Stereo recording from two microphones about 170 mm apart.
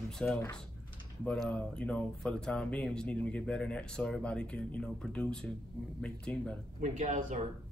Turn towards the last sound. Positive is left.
turn(degrees=-45)  # may be behind; listen again after turning